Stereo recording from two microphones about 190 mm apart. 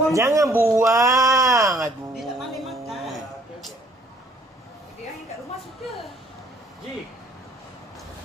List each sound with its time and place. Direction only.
0.1 s a man's voice: 15° right (ahead or behind)
2.1 s music: centre (ahead or behind)